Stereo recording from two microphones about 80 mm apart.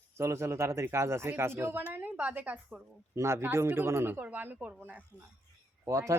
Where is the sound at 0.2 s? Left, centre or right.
Right; by 2.8 s centre.